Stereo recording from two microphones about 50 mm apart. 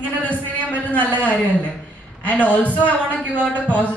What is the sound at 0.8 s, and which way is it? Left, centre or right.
A woman's voice, left.